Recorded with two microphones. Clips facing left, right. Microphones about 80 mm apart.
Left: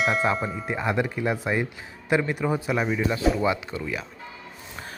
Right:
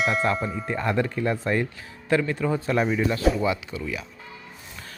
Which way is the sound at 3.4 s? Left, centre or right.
Left.